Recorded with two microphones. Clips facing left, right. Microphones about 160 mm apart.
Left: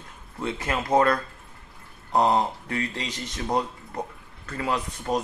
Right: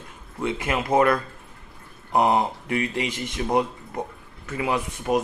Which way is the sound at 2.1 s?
15° right (ahead or behind).